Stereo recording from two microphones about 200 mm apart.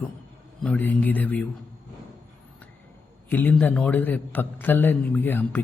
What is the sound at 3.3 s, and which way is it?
A man's voice, 10° left (ahead or behind).